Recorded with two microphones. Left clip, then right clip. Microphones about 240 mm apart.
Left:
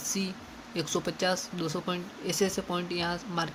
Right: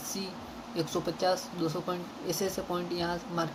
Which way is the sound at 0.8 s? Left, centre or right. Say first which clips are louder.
Left 1 dB; left.